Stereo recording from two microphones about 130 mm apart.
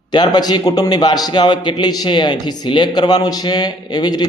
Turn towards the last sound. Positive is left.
turn(degrees=35)  # may be behind; listen again after turning